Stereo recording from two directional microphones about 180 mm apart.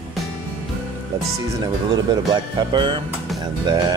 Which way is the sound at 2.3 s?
25° right (ahead or behind).